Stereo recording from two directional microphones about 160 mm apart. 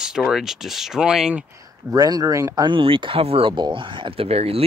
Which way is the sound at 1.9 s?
25° right (ahead or behind).